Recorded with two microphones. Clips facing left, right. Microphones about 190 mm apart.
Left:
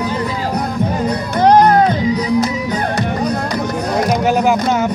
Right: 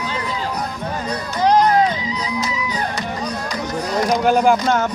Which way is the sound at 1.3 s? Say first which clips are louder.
Left 4 dB; 55° left (ahead or behind).